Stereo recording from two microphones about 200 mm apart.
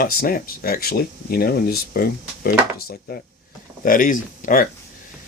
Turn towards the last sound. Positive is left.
turn(degrees=45)  # may be behind; listen again after turning